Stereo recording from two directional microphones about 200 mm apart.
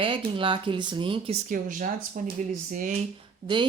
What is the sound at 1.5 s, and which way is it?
Speech, 40° right (ahead or behind).